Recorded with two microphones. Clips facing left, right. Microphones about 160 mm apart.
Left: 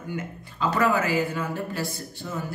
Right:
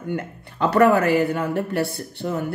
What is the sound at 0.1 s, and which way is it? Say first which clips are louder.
Speech: right 5 dB; 60° right (ahead or behind).